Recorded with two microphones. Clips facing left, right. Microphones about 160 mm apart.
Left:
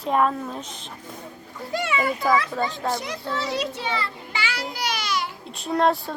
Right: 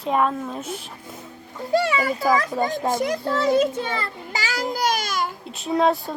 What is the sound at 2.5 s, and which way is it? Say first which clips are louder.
Speech: right 3 dB; 10° right (ahead or behind).